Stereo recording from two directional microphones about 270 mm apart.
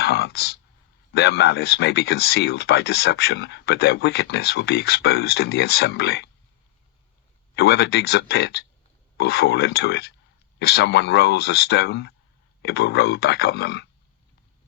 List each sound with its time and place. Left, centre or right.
0.0 s a sound: left
1.1 s speech: left
7.5 s speech: left